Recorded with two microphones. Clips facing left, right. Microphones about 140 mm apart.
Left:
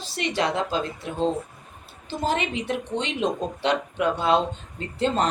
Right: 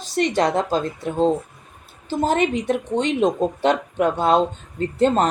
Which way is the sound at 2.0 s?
45° right (ahead or behind).